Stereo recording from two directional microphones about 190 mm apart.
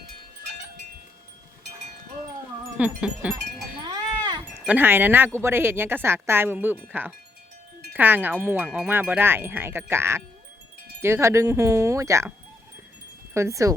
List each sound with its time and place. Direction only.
2.7 s speech: 5° right (ahead or behind)
3.8 s livestock: 25° right (ahead or behind)
4.6 s speech: 10° right (ahead or behind)
13.3 s speech: 15° right (ahead or behind)